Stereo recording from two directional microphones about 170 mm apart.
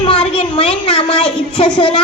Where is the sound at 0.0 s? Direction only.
30° left (ahead or behind).